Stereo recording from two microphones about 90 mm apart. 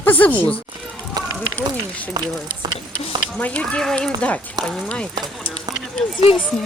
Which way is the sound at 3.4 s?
15° left (ahead or behind).